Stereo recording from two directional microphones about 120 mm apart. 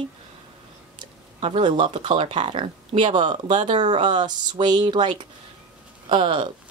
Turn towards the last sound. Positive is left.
turn(degrees=-45)  # may be behind; listen again after turning